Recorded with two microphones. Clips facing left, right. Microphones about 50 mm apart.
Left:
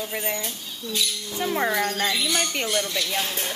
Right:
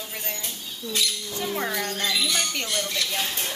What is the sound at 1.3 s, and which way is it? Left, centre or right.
Speech, centre.